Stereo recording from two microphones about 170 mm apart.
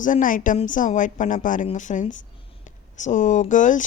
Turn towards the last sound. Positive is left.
turn(degrees=50)  # may be behind; listen again after turning